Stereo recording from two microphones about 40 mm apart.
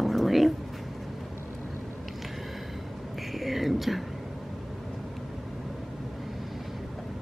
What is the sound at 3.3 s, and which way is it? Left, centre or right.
Whispering, centre.